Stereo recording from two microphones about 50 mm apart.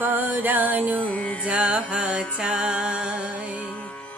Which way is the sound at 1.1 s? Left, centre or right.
Left.